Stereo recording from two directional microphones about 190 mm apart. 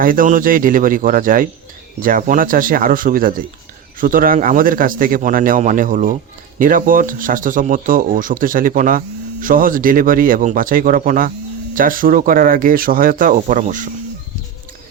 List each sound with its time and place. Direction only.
0.0 s speech: 45° right (ahead or behind)